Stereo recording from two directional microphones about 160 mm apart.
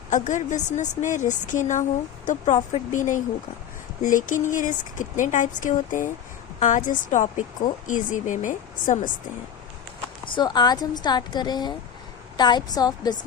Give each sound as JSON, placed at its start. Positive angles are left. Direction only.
{"t": 0.1, "sound": "speech", "side_deg": 50}
{"t": 10.3, "sound": "speech", "side_deg": 25}